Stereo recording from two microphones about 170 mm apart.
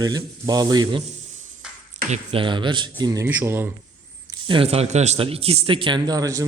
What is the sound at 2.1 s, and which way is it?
Speech, 30° right (ahead or behind).